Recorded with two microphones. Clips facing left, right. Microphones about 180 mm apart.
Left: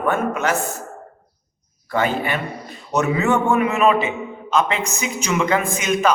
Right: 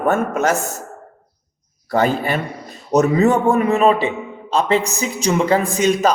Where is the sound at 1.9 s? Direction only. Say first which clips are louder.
Right 3 dB; 40° right (ahead or behind).